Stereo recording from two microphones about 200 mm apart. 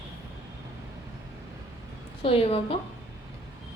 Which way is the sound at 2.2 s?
30° left (ahead or behind).